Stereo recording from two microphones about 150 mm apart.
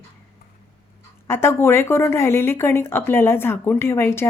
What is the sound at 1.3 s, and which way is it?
Speech, 15° left (ahead or behind).